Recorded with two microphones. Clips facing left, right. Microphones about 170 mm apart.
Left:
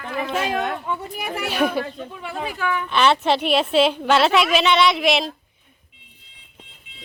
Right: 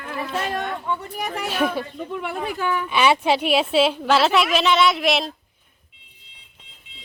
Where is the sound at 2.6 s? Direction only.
30° right (ahead or behind).